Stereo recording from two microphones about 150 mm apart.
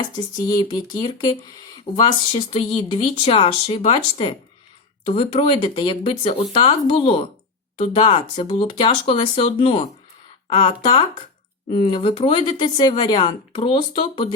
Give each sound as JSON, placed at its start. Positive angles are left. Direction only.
{"t": 0.4, "sound": "speech", "side_deg": 30}